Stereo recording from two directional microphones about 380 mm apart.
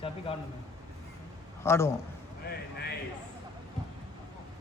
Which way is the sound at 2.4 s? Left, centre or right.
Left.